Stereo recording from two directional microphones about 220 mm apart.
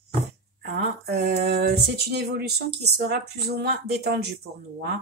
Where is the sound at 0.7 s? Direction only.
45° right (ahead or behind).